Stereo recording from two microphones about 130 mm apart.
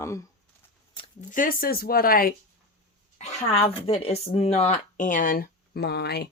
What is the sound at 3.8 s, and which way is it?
Speech, 50° left (ahead or behind).